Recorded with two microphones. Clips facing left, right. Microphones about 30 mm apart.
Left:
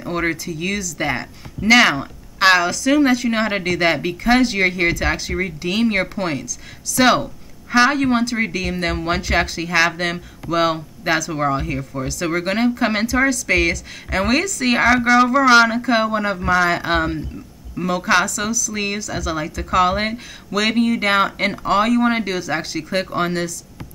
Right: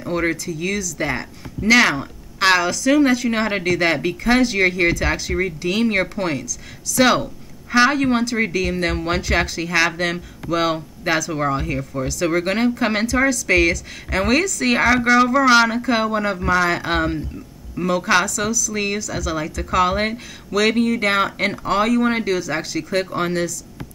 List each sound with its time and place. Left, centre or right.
0.0 s speech: centre